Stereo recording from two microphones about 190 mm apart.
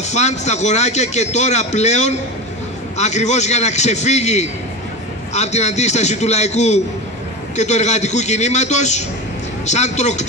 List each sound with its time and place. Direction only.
0.0 s a man's voice: 35° left (ahead or behind)